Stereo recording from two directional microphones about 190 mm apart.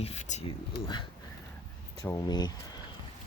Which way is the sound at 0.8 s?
25° left (ahead or behind).